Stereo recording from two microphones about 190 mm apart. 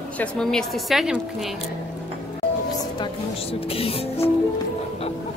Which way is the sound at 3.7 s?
30° left (ahead or behind).